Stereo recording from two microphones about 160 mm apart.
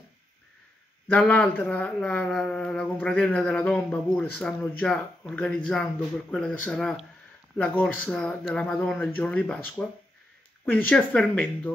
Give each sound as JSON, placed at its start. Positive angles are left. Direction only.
{"t": 1.0, "sound": "speech", "side_deg": 10}